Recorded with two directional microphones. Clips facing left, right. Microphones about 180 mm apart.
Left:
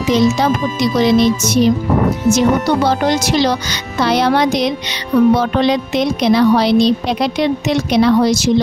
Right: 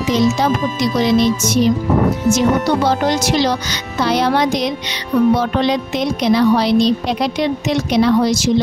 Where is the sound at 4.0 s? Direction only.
70° left (ahead or behind).